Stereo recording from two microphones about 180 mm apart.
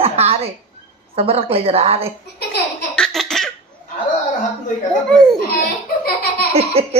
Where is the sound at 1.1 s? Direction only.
35° right (ahead or behind).